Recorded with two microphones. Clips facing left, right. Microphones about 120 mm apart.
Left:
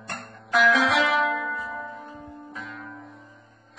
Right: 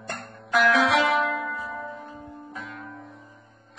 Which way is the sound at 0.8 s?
30° right (ahead or behind).